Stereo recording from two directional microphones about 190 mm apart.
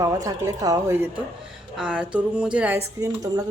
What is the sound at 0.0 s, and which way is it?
A woman's voice, 20° right (ahead or behind).